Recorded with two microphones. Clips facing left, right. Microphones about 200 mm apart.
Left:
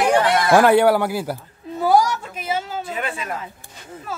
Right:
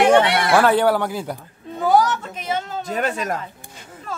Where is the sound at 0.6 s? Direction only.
10° left (ahead or behind).